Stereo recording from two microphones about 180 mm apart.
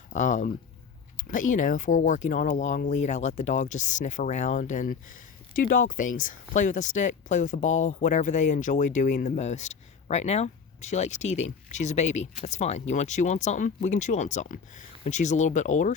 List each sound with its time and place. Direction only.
0.1 s speech: 45° left (ahead or behind)